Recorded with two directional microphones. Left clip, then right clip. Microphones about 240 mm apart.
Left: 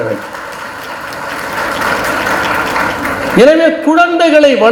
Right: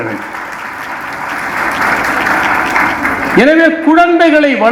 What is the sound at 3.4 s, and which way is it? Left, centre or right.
A man's voice, left.